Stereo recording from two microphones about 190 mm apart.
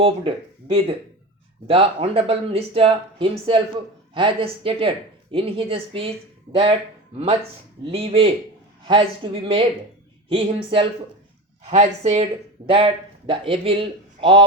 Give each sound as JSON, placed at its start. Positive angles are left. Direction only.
{"t": 0.0, "sound": "speech", "side_deg": -30}